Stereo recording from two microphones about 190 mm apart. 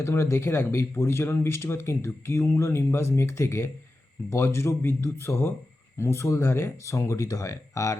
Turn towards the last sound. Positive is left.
turn(degrees=15)  # may be behind; listen again after turning